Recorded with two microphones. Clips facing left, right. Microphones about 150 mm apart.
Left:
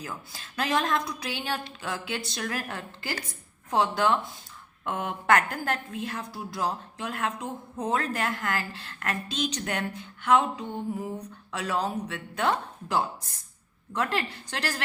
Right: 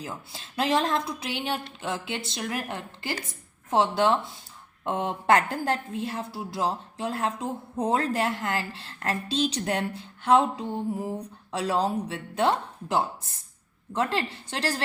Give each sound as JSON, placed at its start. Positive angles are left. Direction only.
{"t": 0.0, "sound": "a woman's voice", "side_deg": -25}